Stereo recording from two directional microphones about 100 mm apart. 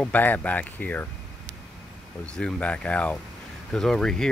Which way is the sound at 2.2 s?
10° left (ahead or behind).